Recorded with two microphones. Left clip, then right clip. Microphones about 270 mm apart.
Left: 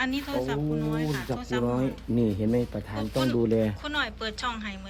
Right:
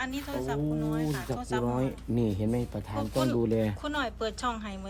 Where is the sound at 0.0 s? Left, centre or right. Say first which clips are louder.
Left 5 dB; centre.